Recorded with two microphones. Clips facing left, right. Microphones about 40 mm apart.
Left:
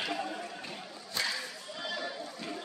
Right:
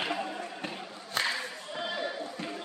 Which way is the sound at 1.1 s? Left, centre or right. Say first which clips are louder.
Right 4 dB; right.